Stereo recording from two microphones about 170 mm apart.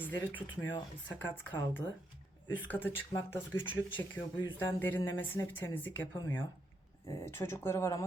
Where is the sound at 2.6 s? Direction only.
10° left (ahead or behind).